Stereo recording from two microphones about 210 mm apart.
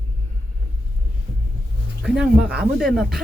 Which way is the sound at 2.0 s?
5° right (ahead or behind).